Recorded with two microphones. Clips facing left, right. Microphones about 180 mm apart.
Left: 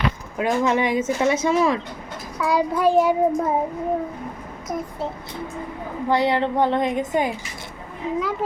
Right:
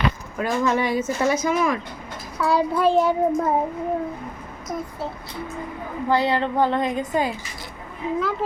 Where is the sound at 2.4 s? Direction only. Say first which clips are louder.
Even; 15° left (ahead or behind).